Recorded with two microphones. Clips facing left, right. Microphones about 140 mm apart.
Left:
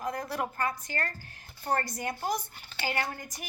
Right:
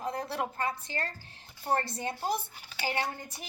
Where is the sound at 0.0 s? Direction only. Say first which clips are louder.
Even; 30° right (ahead or behind).